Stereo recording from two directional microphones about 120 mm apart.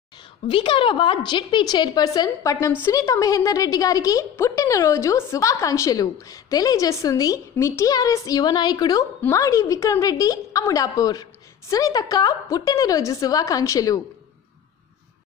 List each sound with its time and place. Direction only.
0.5 s a woman's voice: 45° left (ahead or behind); by 14.0 s 30° left (ahead or behind)